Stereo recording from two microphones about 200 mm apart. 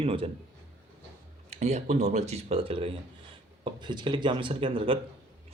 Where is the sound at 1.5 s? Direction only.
35° right (ahead or behind).